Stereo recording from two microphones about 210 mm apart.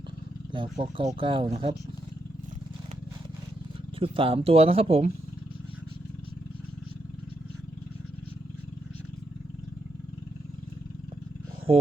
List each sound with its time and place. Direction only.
0.5 s speech: 25° right (ahead or behind)
4.0 s speech: 25° right (ahead or behind)